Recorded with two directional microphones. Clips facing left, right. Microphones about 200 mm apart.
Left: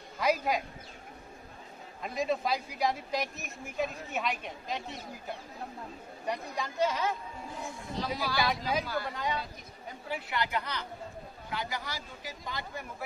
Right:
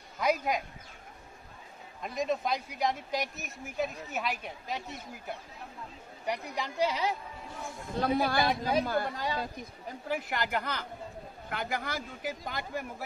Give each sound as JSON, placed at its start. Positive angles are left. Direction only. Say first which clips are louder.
{"t": 0.2, "sound": "speech", "louder": "even", "side_deg": 0}
{"t": 2.0, "sound": "speech", "louder": "even", "side_deg": 0}
{"t": 6.2, "sound": "a woman's voice", "louder": "right 1 dB", "side_deg": -15}
{"t": 7.9, "sound": "a man's voice", "louder": "right 6 dB", "side_deg": -55}
{"t": 9.1, "sound": "a man's voice", "louder": "right 1 dB", "side_deg": -35}